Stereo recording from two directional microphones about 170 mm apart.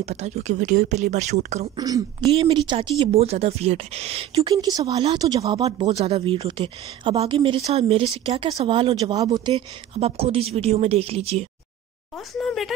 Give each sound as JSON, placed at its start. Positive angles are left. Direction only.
{"t": 0.0, "sound": "speech", "side_deg": -40}
{"t": 1.8, "sound": "speech", "side_deg": -20}
{"t": 2.3, "sound": "speech", "side_deg": -30}
{"t": 4.4, "sound": "speech", "side_deg": -25}
{"t": 9.9, "sound": "speech", "side_deg": -35}
{"t": 12.4, "sound": "speech", "side_deg": 0}